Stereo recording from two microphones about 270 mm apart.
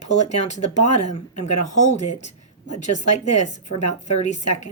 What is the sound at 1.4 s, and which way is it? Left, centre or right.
Speech, left.